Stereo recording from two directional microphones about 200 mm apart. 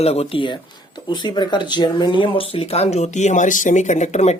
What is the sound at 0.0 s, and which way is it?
Speech, 30° left (ahead or behind).